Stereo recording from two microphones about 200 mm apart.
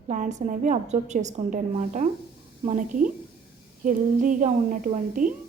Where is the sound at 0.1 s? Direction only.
35° right (ahead or behind).